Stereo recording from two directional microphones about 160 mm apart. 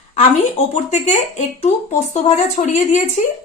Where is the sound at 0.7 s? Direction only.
45° left (ahead or behind).